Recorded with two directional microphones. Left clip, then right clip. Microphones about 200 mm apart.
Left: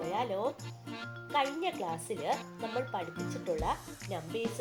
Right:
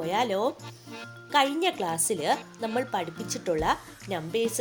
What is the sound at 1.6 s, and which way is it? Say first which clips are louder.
Speech: right 8 dB; 45° right (ahead or behind).